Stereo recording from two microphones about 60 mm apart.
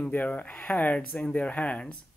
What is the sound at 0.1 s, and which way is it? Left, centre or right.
Speech, left.